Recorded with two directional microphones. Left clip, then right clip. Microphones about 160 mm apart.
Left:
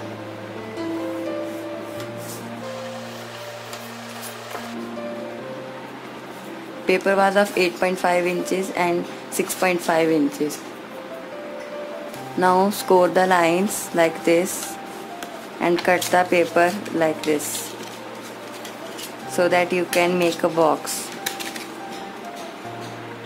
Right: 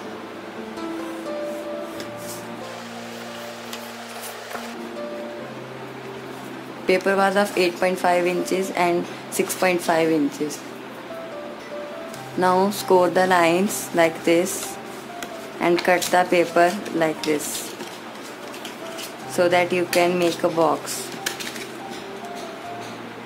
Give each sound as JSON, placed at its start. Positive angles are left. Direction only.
{"t": 6.9, "sound": "speech", "side_deg": 20}
{"t": 12.4, "sound": "speech", "side_deg": 15}
{"t": 15.8, "sound": "speech", "side_deg": 15}
{"t": 19.3, "sound": "speech", "side_deg": 15}